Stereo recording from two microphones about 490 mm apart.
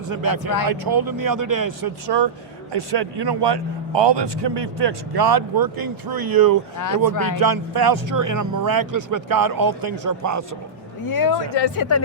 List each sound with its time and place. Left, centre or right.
0.1 s a man's voice: right
6.7 s speech: left
7.3 s a man's voice: right
11.1 s speech: left